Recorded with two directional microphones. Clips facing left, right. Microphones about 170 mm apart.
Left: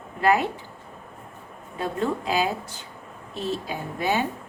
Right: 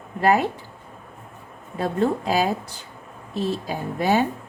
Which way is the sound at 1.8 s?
40° right (ahead or behind).